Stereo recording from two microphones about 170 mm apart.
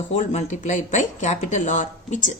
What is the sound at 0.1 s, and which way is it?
Speech, 45° left (ahead or behind).